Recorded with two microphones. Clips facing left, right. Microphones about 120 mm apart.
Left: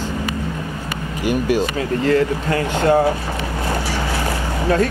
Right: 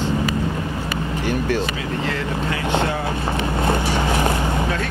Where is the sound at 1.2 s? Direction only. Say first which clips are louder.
Left 4 dB; 10° left (ahead or behind).